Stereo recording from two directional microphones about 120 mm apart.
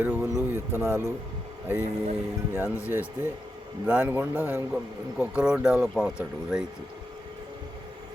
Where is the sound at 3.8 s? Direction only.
15° right (ahead or behind).